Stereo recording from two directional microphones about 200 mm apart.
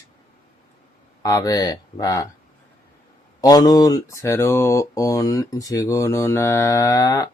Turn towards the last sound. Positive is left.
turn(degrees=15)  # may be behind; listen again after turning